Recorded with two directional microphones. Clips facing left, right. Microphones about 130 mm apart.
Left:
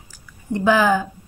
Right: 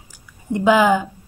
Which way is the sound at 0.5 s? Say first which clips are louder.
Right 2 dB; 15° right (ahead or behind).